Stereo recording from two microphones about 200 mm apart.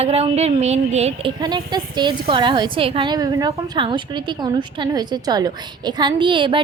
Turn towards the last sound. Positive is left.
turn(degrees=-25)  # may be behind; listen again after turning